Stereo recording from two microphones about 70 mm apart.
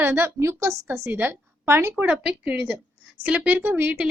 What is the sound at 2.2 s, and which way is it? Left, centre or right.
A woman's voice, centre.